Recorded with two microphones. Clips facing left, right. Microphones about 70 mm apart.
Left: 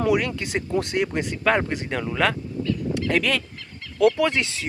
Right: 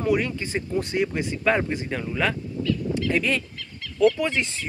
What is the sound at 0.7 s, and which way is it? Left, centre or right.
Speech, left.